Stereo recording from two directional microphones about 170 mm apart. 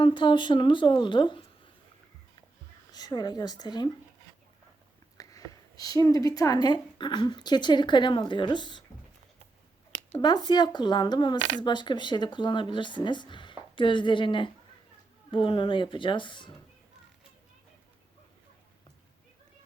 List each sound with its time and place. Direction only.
0.0 s speech: 30° left (ahead or behind)
2.9 s speech: 25° left (ahead or behind)
5.1 s speech: 20° left (ahead or behind)
10.2 s speech: 25° left (ahead or behind)
11.3 s speech: 40° right (ahead or behind)
11.6 s speech: 25° left (ahead or behind)